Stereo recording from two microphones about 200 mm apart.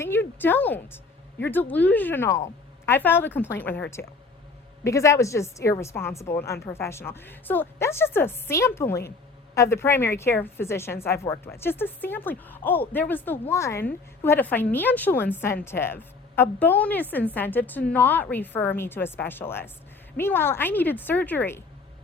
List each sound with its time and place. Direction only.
0.0 s a woman's voice: 10° left (ahead or behind)